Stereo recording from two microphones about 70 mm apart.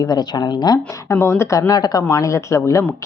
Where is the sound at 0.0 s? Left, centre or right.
Left.